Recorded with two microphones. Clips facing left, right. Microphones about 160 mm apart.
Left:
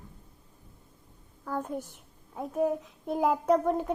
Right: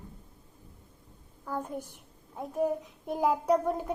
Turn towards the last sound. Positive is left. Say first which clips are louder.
# left 2 dB
turn(degrees=-5)  # may be behind; listen again after turning